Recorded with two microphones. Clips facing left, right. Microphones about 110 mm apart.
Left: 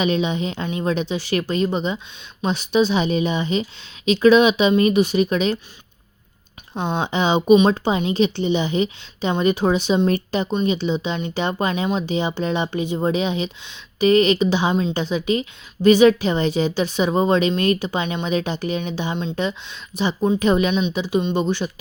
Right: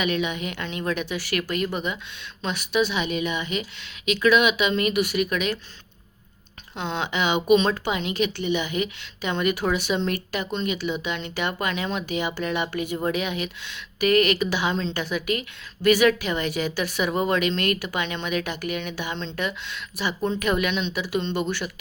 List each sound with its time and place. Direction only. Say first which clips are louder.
0.0 s speech: left 5 dB; 30° left (ahead or behind)
6.7 s speech: left 5 dB; 20° left (ahead or behind)
7.1 s speech: left 5 dB; 30° left (ahead or behind)